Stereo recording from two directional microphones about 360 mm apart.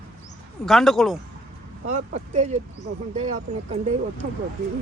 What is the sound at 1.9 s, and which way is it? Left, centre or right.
Speech, centre.